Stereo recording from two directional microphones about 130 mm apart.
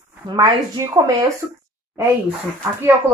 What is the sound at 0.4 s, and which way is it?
Speech, 25° right (ahead or behind).